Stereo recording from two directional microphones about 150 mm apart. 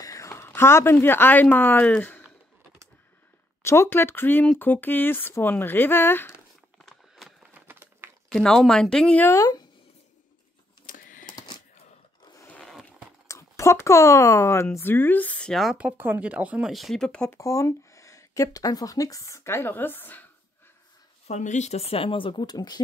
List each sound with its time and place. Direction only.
0.0 s a sound: 20° left (ahead or behind)
0.9 s speech: 15° left (ahead or behind)
3.6 s speech: 15° left (ahead or behind)
6.8 s a sound: centre (ahead or behind)
7.6 s a sound: 15° right (ahead or behind)
8.3 s speech: 5° left (ahead or behind)
9.3 s speech: 25° left (ahead or behind)
10.9 s typing: 60° left (ahead or behind)
12.4 s a sound: 5° left (ahead or behind)
13.3 s speech: 20° left (ahead or behind)
17.4 s speech: 20° left (ahead or behind)
21.3 s speech: 50° left (ahead or behind); by 22.8 s 25° left (ahead or behind)